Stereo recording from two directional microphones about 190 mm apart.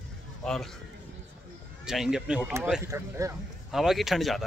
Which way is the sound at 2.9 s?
15° right (ahead or behind).